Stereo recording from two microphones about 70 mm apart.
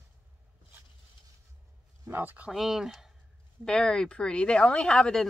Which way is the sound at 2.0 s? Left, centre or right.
Right.